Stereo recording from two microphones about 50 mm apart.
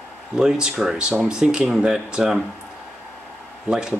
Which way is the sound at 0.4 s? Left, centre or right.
Centre.